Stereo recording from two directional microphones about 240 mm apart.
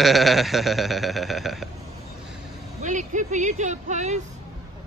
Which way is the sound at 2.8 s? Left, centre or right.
Right.